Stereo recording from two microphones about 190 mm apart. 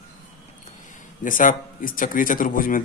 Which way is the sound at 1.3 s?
45° left (ahead or behind).